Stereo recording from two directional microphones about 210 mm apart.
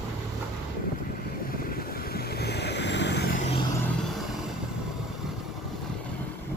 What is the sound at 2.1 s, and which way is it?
Vehicle, 50° left (ahead or behind).